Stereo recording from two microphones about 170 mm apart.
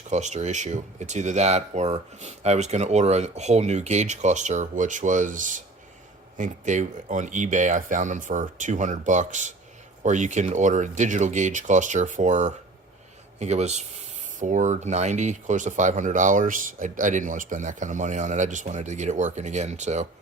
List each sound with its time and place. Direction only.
0.1 s speech: 45° right (ahead or behind)